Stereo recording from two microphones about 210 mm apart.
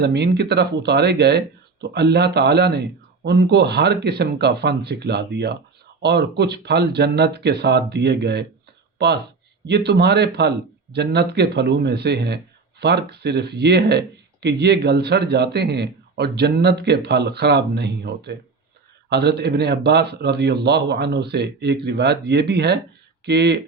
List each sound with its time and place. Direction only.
0.0 s speech: 50° right (ahead or behind)
9.6 s speech: 55° right (ahead or behind)